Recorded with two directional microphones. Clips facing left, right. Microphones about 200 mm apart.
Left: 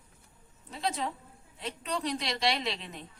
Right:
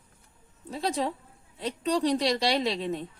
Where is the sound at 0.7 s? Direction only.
35° right (ahead or behind).